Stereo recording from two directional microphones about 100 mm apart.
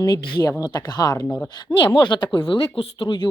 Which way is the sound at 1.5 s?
50° left (ahead or behind).